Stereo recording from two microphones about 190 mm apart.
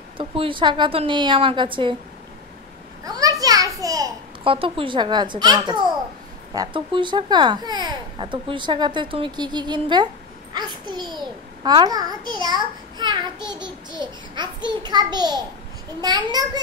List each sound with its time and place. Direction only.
0.2 s speech: 25° right (ahead or behind)
3.0 s a sound: 20° right (ahead or behind)
6.5 s a child's voice: 25° right (ahead or behind)